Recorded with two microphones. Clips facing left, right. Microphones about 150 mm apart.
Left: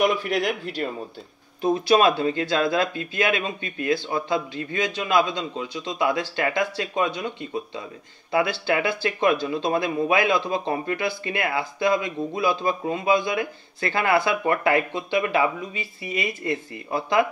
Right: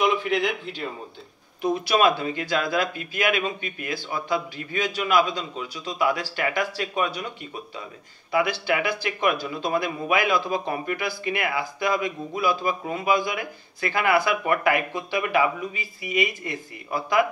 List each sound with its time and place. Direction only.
0.2 s speech: 40° left (ahead or behind)
1.6 s speech: 30° left (ahead or behind)
8.3 s speech: 30° left (ahead or behind)